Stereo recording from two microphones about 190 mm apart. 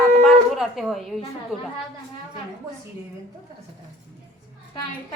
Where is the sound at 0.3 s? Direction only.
Centre (ahead or behind).